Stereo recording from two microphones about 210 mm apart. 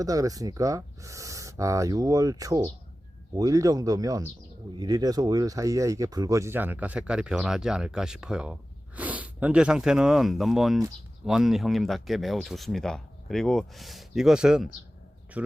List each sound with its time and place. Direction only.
0.0 s speech: 15° right (ahead or behind)